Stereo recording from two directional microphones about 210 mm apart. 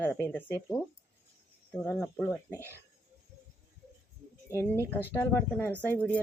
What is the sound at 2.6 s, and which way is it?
Speech, 10° right (ahead or behind).